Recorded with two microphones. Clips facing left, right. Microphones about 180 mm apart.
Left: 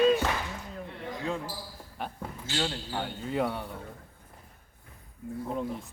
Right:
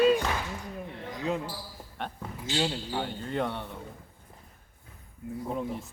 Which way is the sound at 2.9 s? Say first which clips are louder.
Left 2 dB; centre (ahead or behind).